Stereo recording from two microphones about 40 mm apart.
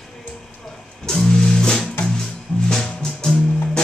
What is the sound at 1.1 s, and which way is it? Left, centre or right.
Music, centre.